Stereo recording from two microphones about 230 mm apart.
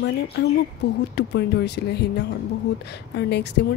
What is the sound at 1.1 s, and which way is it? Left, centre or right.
Speech, left.